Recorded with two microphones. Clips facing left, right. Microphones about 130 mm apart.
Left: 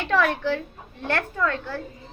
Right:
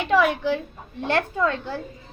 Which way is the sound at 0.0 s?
10° right (ahead or behind).